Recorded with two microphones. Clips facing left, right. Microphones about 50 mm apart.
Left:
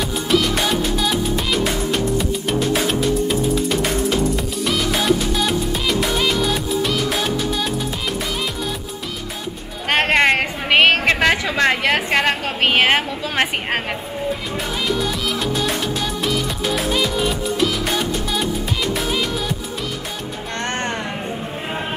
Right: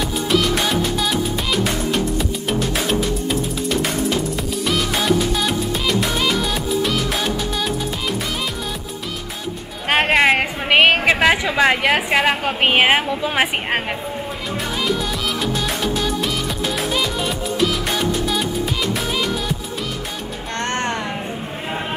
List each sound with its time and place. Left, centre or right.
0.3 s music: centre
9.8 s a sound: centre
14.9 s music: centre
20.5 s music: left